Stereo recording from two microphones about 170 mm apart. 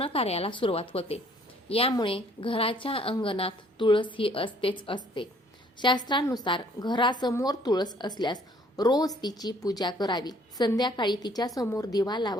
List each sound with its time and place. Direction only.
0.0 s a woman's voice: 35° left (ahead or behind)